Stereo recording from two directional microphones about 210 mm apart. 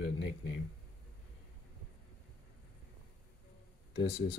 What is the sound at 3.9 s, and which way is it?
Speech, 55° left (ahead or behind).